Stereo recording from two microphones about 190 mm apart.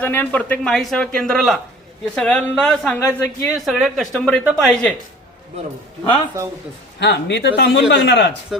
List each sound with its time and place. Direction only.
0.0 s speech: 10° left (ahead or behind)
7.0 s speech: 65° left (ahead or behind)